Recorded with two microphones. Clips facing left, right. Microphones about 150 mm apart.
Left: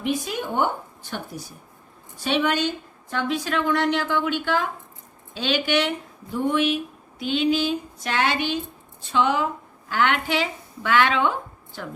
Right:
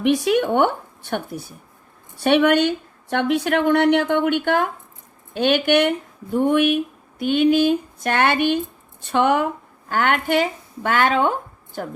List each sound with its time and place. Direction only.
0.0 s a woman's voice: 70° right (ahead or behind); by 11.9 s 45° right (ahead or behind)